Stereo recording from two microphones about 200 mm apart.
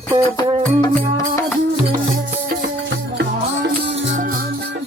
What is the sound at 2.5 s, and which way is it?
Music, 50° right (ahead or behind).